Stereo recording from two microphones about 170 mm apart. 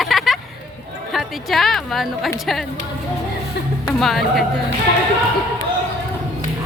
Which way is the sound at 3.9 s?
Centre (ahead or behind).